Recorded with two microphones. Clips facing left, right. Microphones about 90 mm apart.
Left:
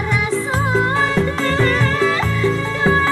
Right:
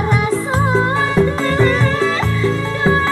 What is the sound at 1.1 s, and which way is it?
Music, 15° right (ahead or behind).